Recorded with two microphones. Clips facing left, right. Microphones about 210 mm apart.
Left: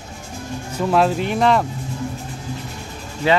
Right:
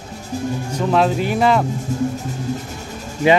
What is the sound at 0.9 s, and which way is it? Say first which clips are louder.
Speech: right 1 dB; centre (ahead or behind).